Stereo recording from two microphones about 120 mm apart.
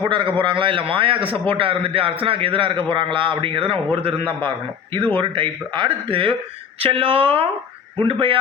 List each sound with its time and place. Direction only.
0.0 s a man's voice: 40° right (ahead or behind)